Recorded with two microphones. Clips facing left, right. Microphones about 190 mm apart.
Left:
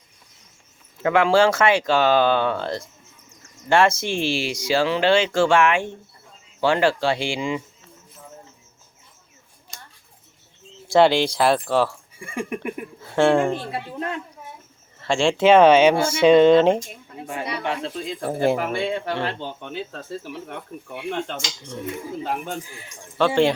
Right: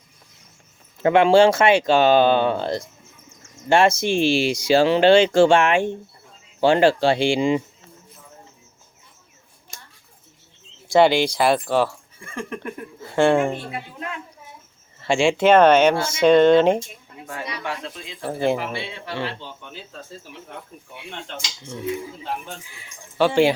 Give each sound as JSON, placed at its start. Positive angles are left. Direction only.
{"t": 1.0, "sound": "speech", "side_deg": -25}
{"t": 10.8, "sound": "speech", "side_deg": 0}
{"t": 12.2, "sound": "speech", "side_deg": 10}
{"t": 13.0, "sound": "speech", "side_deg": 0}
{"t": 15.0, "sound": "speech", "side_deg": -5}
{"t": 17.6, "sound": "speech", "side_deg": 25}
{"t": 17.9, "sound": "speech", "side_deg": 45}
{"t": 23.1, "sound": "speech", "side_deg": -5}